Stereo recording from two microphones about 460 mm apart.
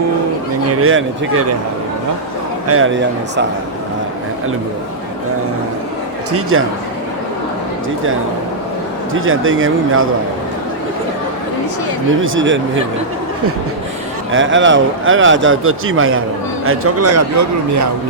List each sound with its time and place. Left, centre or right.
0.7 s a man's voice: right
2.6 s a man's voice: right
6.3 s a man's voice: right
9.1 s a man's voice: right
12.2 s a man's voice: right
14.3 s a man's voice: right